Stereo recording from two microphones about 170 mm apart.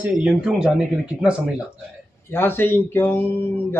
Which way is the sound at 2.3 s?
15° left (ahead or behind).